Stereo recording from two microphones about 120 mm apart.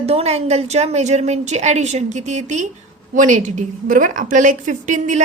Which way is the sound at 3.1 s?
90° right.